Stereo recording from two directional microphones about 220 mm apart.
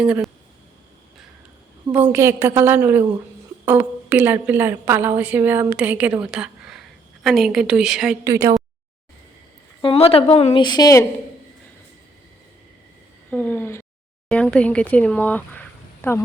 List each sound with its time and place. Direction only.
0.0 s speech: 5° right (ahead or behind)
1.9 s a woman's voice: 10° right (ahead or behind)
8.3 s a woman's voice: 15° right (ahead or behind)
9.8 s a woman's voice: 25° left (ahead or behind)
13.3 s speech: 5° left (ahead or behind)